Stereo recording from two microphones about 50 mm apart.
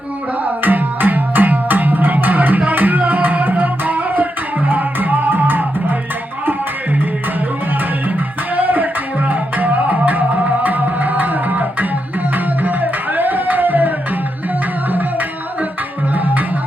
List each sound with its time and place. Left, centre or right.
0.4 s music: right
8.5 s music: right